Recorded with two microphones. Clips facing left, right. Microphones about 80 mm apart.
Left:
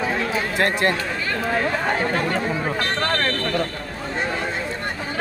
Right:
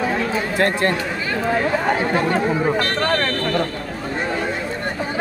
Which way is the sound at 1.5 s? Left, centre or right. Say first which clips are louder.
Right 3 dB; centre.